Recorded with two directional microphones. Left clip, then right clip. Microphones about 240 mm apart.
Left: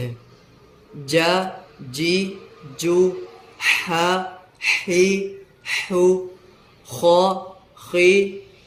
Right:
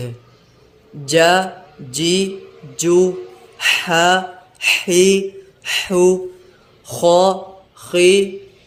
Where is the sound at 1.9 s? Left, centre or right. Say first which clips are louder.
Right 4 dB; centre.